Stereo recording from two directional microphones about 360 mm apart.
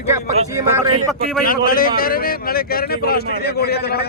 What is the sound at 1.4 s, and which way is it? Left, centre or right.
A man's voice, left.